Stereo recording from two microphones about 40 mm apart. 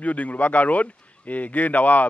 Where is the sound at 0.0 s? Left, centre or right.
Left.